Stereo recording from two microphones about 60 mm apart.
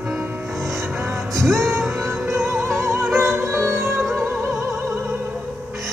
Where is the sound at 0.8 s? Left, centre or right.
Right.